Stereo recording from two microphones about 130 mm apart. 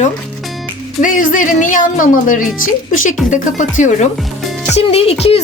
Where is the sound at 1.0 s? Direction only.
90° left.